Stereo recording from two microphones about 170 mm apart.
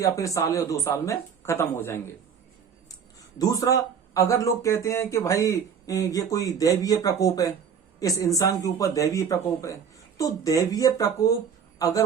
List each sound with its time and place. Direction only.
0.0 s speech: 20° left (ahead or behind)